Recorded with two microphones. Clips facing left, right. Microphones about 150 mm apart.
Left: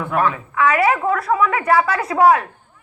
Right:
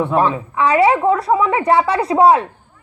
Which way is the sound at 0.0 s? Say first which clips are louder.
Right 4 dB; 30° right (ahead or behind).